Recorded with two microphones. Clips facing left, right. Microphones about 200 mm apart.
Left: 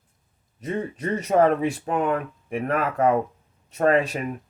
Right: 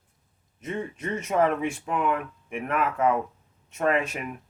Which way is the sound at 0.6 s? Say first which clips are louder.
Left 4 dB; 40° left (ahead or behind).